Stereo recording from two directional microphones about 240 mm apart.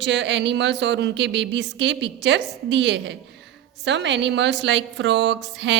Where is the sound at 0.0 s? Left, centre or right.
Right.